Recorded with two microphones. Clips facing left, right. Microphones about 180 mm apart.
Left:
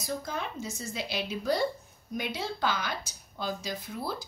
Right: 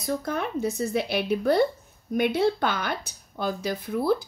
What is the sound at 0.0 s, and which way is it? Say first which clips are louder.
Speech: right 7 dB; 60° right (ahead or behind).